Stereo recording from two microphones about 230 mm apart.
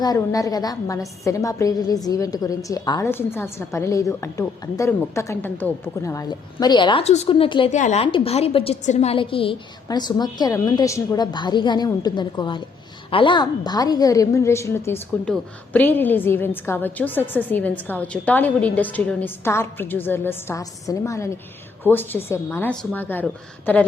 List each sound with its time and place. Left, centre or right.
0.0 s a woman's voice: centre